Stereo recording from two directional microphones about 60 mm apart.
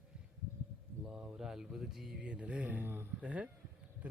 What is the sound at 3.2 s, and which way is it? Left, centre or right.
Speech, right.